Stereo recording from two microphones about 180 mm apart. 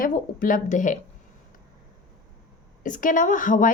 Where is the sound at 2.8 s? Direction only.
45° left (ahead or behind).